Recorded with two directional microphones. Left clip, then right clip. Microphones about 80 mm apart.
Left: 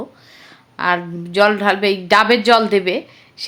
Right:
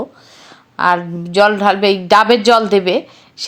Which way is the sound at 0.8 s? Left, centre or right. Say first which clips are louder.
Right 4 dB; right.